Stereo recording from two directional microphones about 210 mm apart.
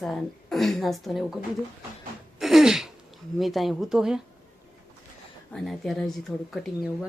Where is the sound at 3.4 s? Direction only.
Centre (ahead or behind).